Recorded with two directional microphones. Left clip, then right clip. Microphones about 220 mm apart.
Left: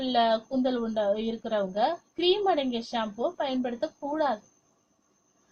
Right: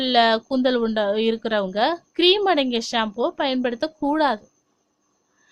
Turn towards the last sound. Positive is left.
turn(degrees=-35)  # may be behind; listen again after turning